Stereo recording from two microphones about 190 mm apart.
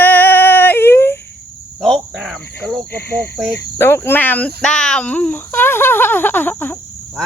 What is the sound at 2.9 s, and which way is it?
Speech, 10° left (ahead or behind).